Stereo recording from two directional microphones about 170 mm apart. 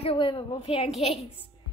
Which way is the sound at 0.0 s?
30° left (ahead or behind).